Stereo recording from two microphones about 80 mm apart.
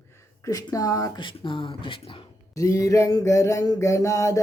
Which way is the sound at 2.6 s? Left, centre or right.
Left.